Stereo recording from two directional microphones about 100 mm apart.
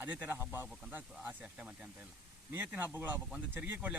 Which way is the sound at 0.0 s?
20° right (ahead or behind).